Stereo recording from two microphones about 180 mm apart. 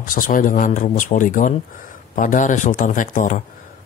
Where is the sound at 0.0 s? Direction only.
50° left (ahead or behind).